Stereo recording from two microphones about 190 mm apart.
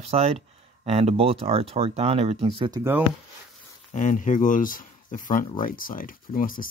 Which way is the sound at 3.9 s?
40° left (ahead or behind).